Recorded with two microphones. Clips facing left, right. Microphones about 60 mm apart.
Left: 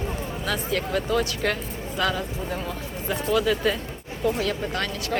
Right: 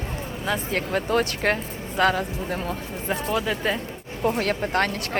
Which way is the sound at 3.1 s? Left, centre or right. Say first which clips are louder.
Left 2 dB; right.